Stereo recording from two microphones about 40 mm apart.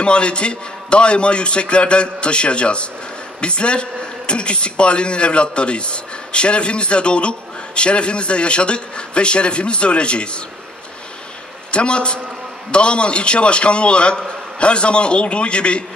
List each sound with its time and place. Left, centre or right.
0.0 s a man's voice: left
11.7 s a man's voice: left